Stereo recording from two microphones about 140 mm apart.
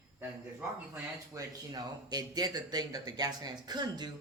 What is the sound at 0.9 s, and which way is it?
Speech, 20° right (ahead or behind).